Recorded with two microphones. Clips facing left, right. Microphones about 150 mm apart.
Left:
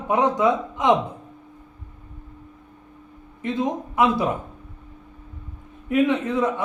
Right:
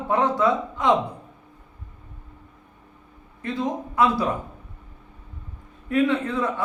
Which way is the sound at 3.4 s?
20° left (ahead or behind).